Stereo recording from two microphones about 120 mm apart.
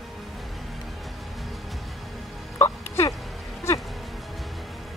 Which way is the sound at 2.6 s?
20° left (ahead or behind).